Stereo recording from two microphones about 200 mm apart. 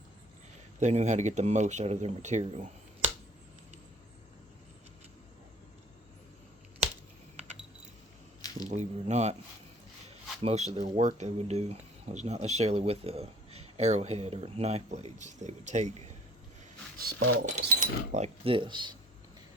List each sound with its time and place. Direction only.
0.8 s speech: 35° right (ahead or behind)
8.4 s squish: 20° left (ahead or behind)
8.7 s speech: 35° right (ahead or behind)
10.4 s speech: 35° right (ahead or behind)
17.4 s speech: 35° right (ahead or behind)